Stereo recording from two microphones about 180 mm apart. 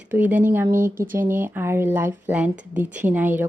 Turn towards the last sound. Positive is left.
turn(degrees=-10)  # may be behind; listen again after turning